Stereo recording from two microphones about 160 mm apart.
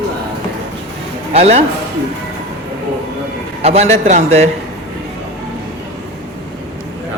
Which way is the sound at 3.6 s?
40° right (ahead or behind).